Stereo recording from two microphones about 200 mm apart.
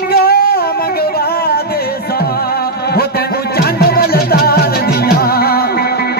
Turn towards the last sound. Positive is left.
turn(degrees=50)  # may be behind; listen again after turning